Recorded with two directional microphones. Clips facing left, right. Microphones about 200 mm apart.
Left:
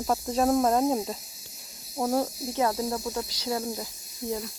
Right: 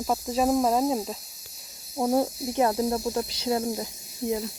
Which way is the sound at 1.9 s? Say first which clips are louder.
Right 3 dB; 15° right (ahead or behind).